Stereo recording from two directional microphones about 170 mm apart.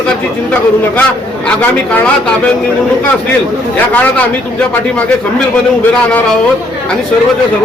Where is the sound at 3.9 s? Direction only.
10° left (ahead or behind).